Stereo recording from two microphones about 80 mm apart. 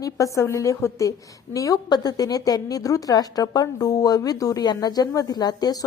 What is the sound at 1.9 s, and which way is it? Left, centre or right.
A woman's voice, left.